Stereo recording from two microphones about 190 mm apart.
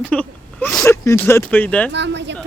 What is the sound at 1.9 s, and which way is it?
Speech, 65° right (ahead or behind).